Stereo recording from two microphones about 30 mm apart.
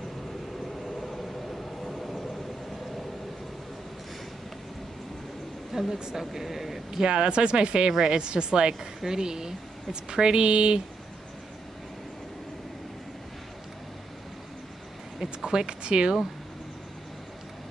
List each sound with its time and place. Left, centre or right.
0.8 s vehicle: centre
5.7 s a sound: centre
6.1 s speech: centre
7.0 s speech: right
15.4 s speech: right